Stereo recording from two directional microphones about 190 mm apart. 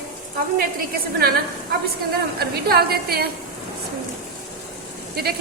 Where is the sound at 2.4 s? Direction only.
55° right (ahead or behind).